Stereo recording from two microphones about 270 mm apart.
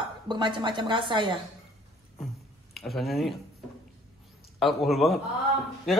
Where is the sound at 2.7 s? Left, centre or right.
Centre.